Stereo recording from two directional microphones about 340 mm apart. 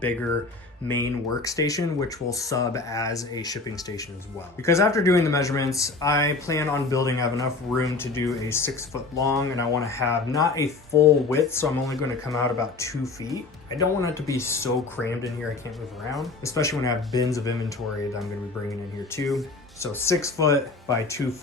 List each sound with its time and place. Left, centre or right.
0.9 s speech: centre
19.1 s speech: centre